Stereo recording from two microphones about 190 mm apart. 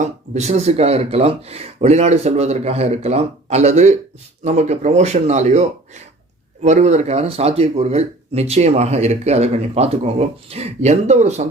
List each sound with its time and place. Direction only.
0.0 s speech: 35° right (ahead or behind)